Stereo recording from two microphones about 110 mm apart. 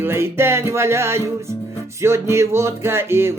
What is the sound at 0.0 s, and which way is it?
Speech, 20° right (ahead or behind).